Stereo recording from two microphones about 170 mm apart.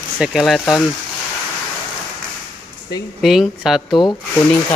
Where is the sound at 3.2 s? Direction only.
Centre (ahead or behind).